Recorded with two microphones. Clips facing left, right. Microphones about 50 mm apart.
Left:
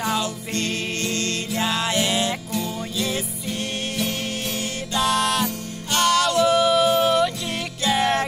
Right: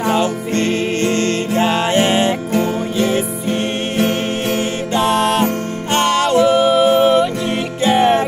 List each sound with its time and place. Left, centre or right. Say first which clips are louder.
0.0 s music: right 8 dB; right